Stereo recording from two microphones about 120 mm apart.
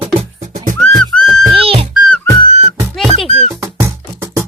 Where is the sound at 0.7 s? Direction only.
5° left (ahead or behind).